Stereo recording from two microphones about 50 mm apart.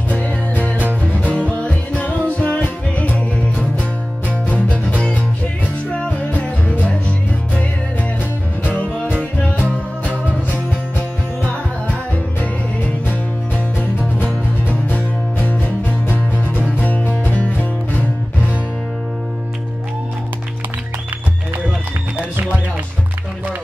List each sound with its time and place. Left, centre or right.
0.2 s music: left
9.4 s music: left
14.7 s music: left